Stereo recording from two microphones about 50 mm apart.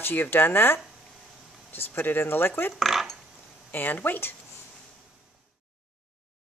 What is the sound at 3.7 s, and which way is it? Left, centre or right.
Speech, left.